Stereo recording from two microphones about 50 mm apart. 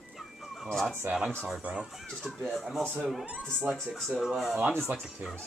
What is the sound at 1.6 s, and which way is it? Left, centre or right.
Speech, right.